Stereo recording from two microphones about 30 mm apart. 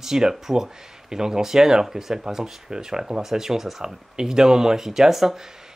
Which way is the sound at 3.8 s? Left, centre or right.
Right.